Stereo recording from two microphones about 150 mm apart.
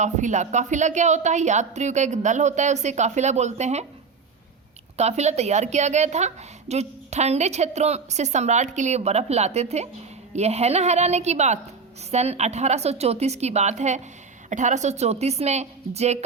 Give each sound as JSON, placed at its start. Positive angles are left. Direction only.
{"t": 0.0, "sound": "a woman's voice", "side_deg": -55}
{"t": 4.9, "sound": "a woman's voice", "side_deg": -45}